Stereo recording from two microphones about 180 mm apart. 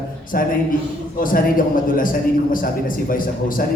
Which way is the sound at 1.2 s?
50° left (ahead or behind).